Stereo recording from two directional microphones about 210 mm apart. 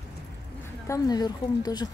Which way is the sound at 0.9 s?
15° left (ahead or behind).